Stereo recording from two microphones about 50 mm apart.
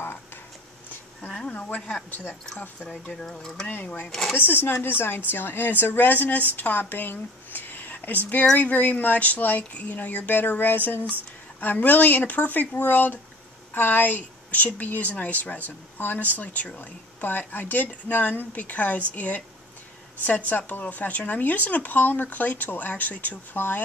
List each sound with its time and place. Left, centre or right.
1.5 s speech: left
2.9 s speech: left
3.3 s speech: centre
3.7 s a woman's voice: left
23.5 s speech: left